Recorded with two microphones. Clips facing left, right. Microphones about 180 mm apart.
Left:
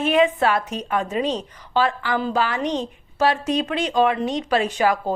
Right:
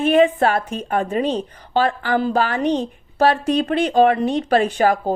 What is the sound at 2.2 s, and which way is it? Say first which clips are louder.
A woman's voice: right 3 dB; 55° right (ahead or behind).